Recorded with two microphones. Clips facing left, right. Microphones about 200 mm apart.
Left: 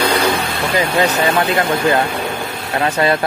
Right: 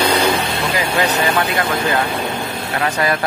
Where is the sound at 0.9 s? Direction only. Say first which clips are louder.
Left 1 dB; 30° left (ahead or behind).